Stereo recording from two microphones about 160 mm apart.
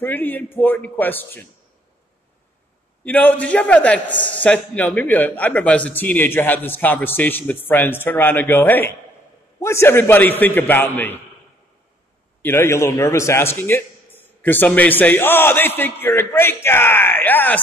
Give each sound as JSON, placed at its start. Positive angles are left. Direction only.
{"t": 0.0, "sound": "a man's voice", "side_deg": 10}
{"t": 3.1, "sound": "a man's voice", "side_deg": 10}
{"t": 12.4, "sound": "a man's voice", "side_deg": 15}